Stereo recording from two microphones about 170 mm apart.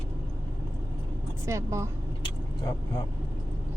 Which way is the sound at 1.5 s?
15° right (ahead or behind).